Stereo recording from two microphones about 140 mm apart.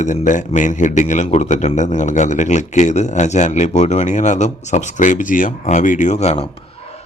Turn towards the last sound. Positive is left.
turn(degrees=50)  # may be behind; listen again after turning